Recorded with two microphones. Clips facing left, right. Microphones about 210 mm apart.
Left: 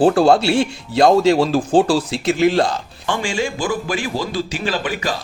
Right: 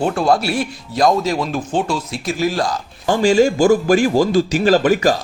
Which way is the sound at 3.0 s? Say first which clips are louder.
Right 9 dB; 40° right (ahead or behind).